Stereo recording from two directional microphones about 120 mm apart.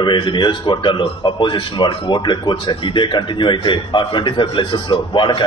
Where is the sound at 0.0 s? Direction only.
40° left (ahead or behind).